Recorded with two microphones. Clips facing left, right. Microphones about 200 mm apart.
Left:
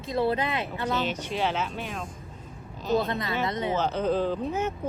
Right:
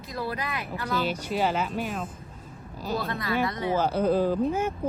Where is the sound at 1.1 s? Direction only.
10° right (ahead or behind).